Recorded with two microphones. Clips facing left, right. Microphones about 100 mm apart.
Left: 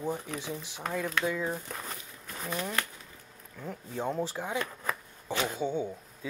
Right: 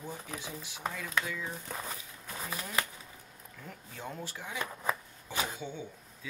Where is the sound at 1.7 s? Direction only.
5° right (ahead or behind).